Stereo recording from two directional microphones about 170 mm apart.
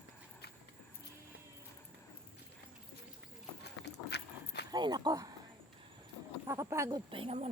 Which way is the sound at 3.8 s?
75° left (ahead or behind).